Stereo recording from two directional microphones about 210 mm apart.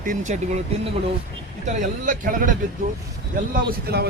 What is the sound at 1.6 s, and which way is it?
Speech, 35° right (ahead or behind).